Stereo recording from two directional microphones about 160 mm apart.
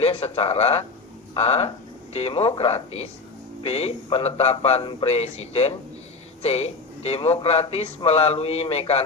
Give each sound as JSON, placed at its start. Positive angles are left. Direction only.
{"t": 0.0, "sound": "speech", "side_deg": 40}